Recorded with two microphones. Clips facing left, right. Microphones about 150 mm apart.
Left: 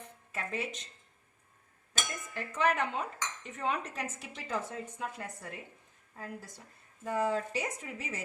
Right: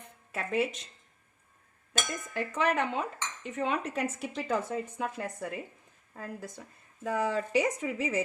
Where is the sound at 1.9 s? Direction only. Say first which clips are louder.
Right 5 dB; 65° right (ahead or behind); by 5.5 s 85° right.